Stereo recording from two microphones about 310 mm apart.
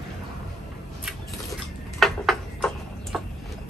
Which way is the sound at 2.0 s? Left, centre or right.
Centre.